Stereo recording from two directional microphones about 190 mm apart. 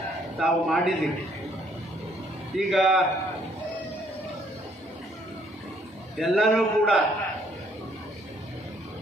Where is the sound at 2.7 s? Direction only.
Centre (ahead or behind).